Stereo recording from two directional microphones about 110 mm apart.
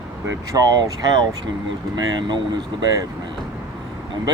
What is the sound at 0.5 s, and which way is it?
Speech, 35° right (ahead or behind).